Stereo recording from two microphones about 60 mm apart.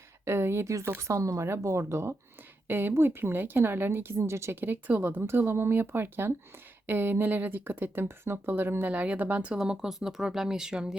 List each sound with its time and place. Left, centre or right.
0.3 s speech: right
2.6 s a woman's voice: right
4.6 s a woman's voice: right
5.4 s a woman's voice: right
8.0 s a woman's voice: right
8.9 s speech: right
9.6 s speech: centre